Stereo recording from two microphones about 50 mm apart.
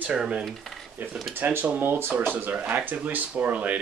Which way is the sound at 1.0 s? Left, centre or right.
Right.